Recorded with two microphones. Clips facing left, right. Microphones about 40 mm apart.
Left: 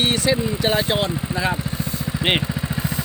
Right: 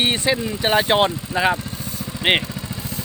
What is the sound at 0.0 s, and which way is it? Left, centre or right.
Speech, right.